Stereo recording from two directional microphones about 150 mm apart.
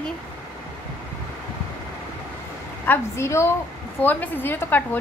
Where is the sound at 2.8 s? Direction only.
15° left (ahead or behind).